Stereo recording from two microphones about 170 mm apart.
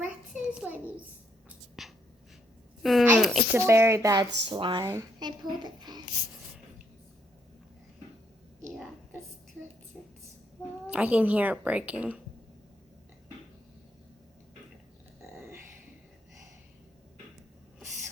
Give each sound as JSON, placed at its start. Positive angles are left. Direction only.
{"t": 0.0, "sound": "a sound", "side_deg": -10}
{"t": 2.8, "sound": "speech", "side_deg": 0}
{"t": 3.7, "sound": "a woman's voice", "side_deg": -15}
{"t": 4.8, "sound": "a child's voice", "side_deg": -20}
{"t": 10.8, "sound": "a woman's voice", "side_deg": -10}